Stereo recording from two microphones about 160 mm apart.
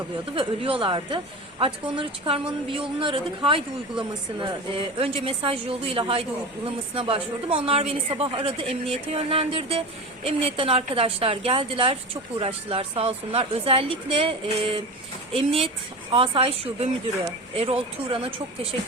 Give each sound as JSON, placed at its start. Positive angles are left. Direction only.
{"t": 0.3, "sound": "speech", "side_deg": -35}